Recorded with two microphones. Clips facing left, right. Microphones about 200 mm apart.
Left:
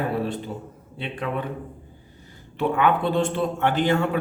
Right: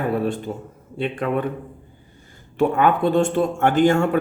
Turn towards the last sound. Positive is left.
turn(degrees=-45)  # may be behind; listen again after turning